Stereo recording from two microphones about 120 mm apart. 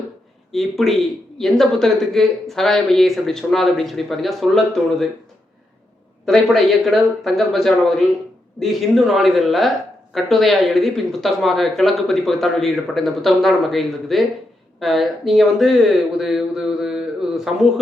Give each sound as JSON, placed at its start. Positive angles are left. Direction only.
{"t": 0.5, "sound": "speech", "side_deg": 0}
{"t": 6.2, "sound": "speech", "side_deg": 0}